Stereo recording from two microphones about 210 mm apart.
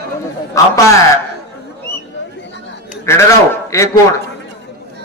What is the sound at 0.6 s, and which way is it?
Speech, 15° left (ahead or behind).